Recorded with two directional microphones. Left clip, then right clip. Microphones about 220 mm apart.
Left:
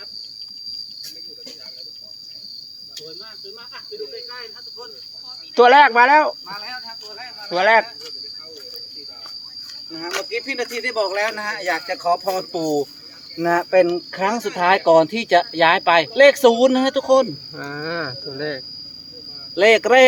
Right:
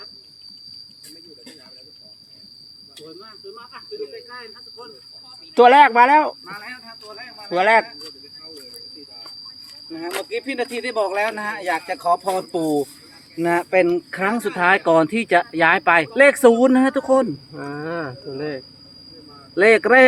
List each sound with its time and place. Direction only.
5.5 s speech: 10° right (ahead or behind)
6.5 s speech: 40° right (ahead or behind)
7.5 s speech: 10° right (ahead or behind)
9.9 s speech: 30° right (ahead or behind); by 17.0 s 15° right (ahead or behind)
17.6 s cricket: centre (ahead or behind)
19.5 s speech: 15° right (ahead or behind)